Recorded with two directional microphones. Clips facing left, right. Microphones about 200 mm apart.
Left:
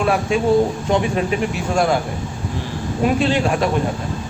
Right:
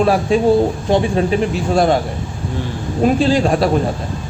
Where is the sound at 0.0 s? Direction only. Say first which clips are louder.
Right 4 dB; 35° right (ahead or behind).